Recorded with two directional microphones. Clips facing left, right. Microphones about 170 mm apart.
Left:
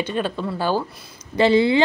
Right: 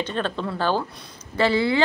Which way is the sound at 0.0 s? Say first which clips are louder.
Left 2 dB; 10° left (ahead or behind).